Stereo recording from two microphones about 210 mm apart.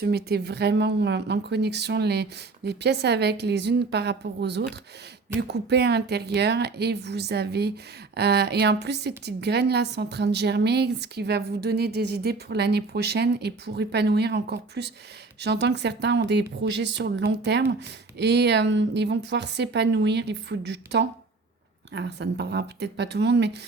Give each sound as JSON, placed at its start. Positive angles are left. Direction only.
{"t": 0.0, "sound": "a woman's voice", "side_deg": -50}